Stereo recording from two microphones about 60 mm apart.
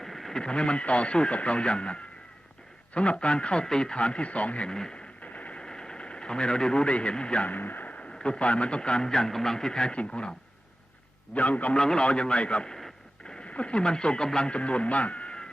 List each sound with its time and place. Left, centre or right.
0.0 s speech: centre
5.2 s a sound: left
7.5 s speech: left
7.9 s speech: centre
11.3 s a man's voice: left
11.8 s speech: centre